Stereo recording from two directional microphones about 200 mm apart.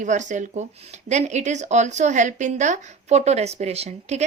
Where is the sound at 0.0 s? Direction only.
35° right (ahead or behind).